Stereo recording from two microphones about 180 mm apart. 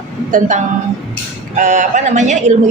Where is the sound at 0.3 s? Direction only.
45° right (ahead or behind).